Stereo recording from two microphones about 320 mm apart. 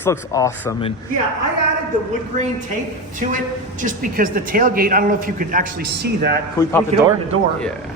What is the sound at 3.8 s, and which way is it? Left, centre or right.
Speech, right.